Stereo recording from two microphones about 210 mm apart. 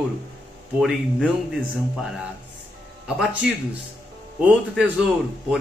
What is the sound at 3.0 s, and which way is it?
A man's voice, 5° right (ahead or behind).